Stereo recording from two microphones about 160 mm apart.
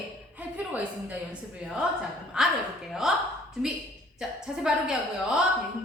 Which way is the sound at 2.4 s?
5° right (ahead or behind).